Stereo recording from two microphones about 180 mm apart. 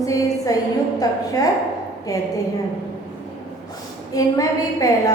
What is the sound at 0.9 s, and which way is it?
Speech, 20° left (ahead or behind).